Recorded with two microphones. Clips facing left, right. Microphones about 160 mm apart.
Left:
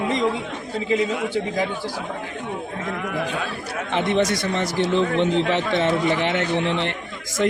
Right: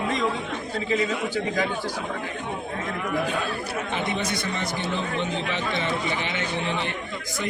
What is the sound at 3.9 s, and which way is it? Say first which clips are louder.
Speech: left 10 dB; 80° left.